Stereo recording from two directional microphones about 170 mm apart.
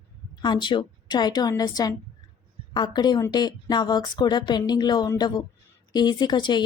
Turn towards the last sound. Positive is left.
turn(degrees=25)  # may be behind; listen again after turning